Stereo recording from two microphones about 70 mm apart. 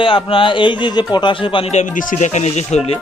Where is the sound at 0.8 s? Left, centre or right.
Left.